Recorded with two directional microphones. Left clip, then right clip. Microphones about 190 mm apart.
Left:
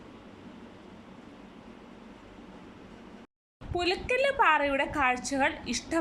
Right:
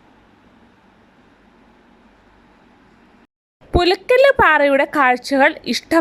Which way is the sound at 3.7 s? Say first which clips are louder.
Right 14 dB; 45° right (ahead or behind).